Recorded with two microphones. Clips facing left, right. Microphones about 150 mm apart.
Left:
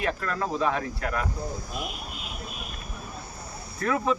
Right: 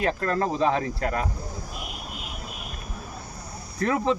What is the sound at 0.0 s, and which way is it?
Speech, 40° right (ahead or behind).